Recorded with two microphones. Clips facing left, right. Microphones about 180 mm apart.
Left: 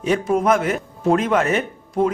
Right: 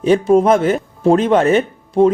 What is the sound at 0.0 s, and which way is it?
Speech, 30° right (ahead or behind).